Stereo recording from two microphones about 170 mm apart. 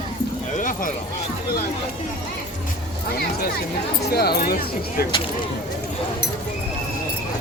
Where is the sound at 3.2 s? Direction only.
65° left (ahead or behind).